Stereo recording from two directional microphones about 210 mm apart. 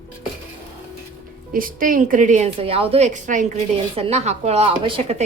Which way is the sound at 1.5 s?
40° right (ahead or behind).